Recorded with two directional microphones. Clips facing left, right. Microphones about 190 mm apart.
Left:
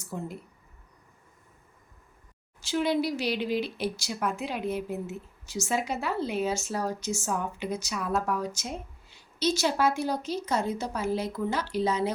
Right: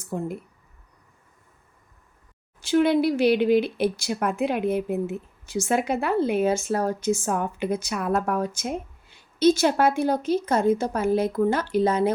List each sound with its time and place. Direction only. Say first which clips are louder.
0.0 s speech: right 7 dB; 55° right (ahead or behind)
2.6 s speech: right 7 dB; 55° right (ahead or behind)